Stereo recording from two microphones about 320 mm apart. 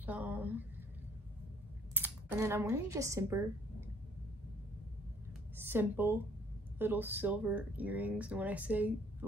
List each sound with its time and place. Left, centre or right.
0.0 s a sound: centre
2.0 s speech: centre
5.6 s speech: centre